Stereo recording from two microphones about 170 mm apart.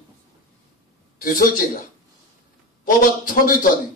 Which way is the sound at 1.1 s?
55° left (ahead or behind).